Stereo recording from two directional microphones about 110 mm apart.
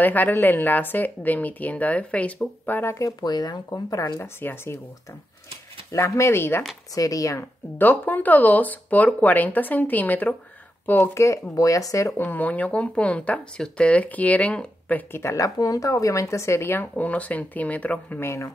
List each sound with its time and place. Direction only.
0.0 s speech: 15° left (ahead or behind)
3.0 s speech: 35° left (ahead or behind)
5.9 s speech: 25° left (ahead or behind)
12.2 s speech: 15° left (ahead or behind)